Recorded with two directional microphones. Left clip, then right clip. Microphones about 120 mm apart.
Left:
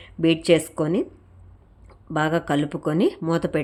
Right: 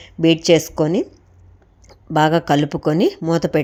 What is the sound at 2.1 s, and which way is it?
Speech, 30° right (ahead or behind).